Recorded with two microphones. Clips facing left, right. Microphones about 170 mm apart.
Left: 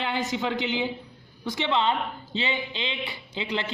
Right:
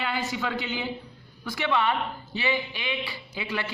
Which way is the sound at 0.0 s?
20° left (ahead or behind).